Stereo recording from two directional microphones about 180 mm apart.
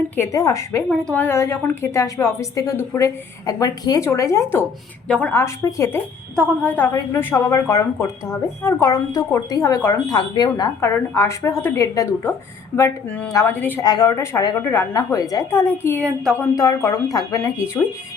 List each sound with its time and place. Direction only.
0.2 s a woman's voice: 20° left (ahead or behind)
6.3 s a woman's voice: 5° left (ahead or behind)